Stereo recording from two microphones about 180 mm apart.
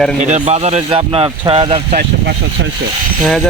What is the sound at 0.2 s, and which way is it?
Speech, 40° right (ahead or behind).